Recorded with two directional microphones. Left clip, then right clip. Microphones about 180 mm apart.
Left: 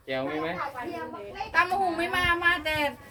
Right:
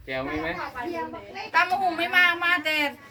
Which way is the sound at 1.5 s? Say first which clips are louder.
Right 2 dB; 25° right (ahead or behind).